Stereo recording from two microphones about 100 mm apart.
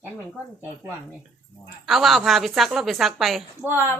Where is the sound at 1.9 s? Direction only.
Centre (ahead or behind).